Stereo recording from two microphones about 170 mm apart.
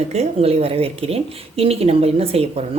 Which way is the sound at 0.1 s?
40° right (ahead or behind).